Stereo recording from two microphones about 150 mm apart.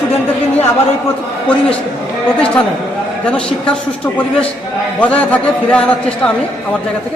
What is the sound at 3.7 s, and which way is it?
A woman's voice, 10° left (ahead or behind).